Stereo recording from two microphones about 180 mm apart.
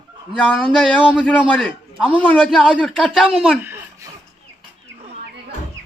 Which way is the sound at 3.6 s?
15° right (ahead or behind).